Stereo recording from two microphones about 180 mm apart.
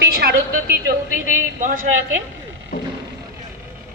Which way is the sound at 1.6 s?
50° right (ahead or behind).